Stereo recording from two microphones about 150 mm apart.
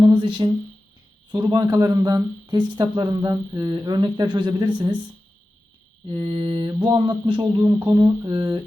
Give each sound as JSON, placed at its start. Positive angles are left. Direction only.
{"t": 0.0, "sound": "a sound", "side_deg": -30}
{"t": 1.3, "sound": "speech", "side_deg": -30}
{"t": 6.1, "sound": "mantra", "side_deg": -30}
{"t": 7.9, "sound": "speech", "side_deg": -30}